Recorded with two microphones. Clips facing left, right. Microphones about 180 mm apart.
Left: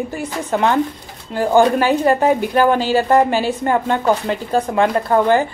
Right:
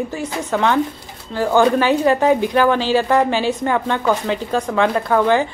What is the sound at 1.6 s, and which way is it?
A woman's voice, 45° left (ahead or behind).